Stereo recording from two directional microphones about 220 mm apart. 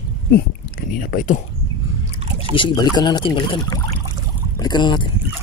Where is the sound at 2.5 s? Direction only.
20° left (ahead or behind).